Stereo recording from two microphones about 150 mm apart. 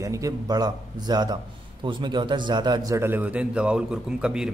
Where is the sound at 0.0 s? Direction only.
20° right (ahead or behind).